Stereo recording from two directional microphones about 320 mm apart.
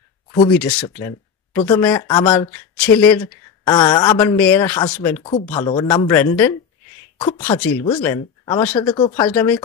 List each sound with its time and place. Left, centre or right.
0.8 s a sound: centre
1.6 s speech: centre
7.2 s speech: centre